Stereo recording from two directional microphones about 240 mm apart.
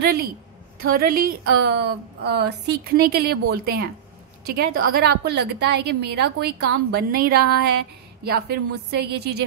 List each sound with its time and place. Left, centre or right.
0.0 s a woman's voice: right